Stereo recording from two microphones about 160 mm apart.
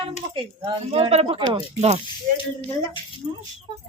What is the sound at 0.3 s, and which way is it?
A woman's voice, 35° right (ahead or behind).